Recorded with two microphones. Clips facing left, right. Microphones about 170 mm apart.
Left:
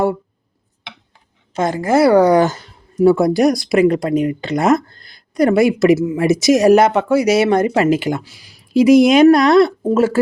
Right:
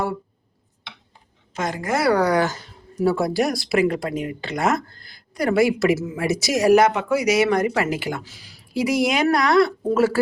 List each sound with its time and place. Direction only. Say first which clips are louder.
1.5 s speech: left 9 dB; 30° left (ahead or behind)